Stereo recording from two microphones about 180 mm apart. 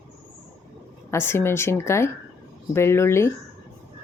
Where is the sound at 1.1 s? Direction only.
15° left (ahead or behind).